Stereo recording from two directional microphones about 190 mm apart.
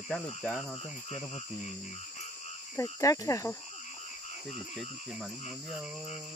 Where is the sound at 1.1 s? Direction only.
35° left (ahead or behind).